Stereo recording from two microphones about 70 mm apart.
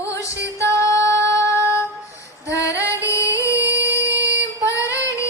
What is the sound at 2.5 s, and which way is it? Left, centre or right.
Female singing, left.